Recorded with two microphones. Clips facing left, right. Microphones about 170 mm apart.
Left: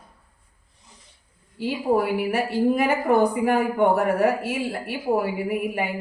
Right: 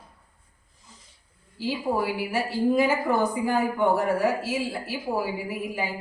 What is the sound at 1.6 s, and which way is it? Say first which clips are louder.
A woman's voice: left 4 dB; 55° left (ahead or behind).